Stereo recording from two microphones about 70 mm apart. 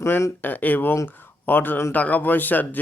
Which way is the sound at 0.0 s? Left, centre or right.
Left.